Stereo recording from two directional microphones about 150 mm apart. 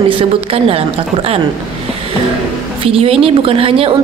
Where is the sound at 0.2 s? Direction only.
40° right (ahead or behind).